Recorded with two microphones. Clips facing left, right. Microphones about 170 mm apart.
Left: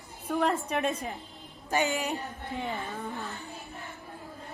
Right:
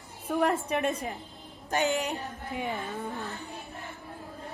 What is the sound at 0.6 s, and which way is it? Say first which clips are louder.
Speech: right 1 dB; 60° right (ahead or behind).